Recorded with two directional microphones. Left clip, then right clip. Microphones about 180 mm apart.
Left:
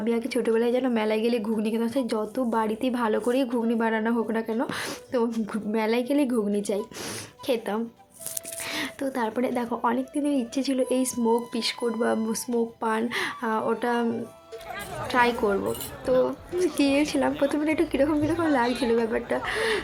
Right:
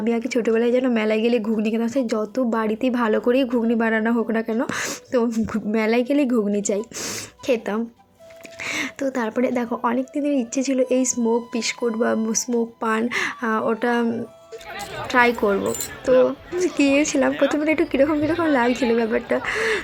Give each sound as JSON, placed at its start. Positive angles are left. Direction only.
{"t": 0.0, "sound": "a woman's voice", "side_deg": -20}